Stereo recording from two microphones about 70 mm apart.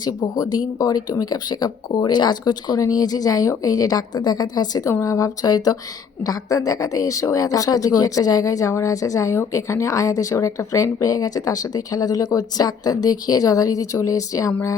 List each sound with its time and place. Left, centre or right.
0.0 s speech: left
2.0 s speech: left
4.9 s speech: left
6.2 s speech: left